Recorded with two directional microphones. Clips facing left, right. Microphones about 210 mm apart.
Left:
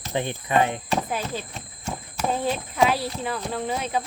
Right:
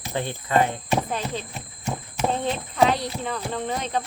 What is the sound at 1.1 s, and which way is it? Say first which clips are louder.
Speech: even; 5° left (ahead or behind).